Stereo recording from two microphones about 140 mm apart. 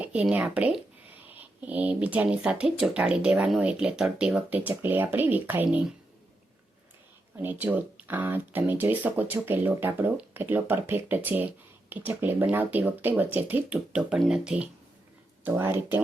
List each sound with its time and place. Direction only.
0.0 s speech: 10° right (ahead or behind)
7.3 s speech: 15° right (ahead or behind)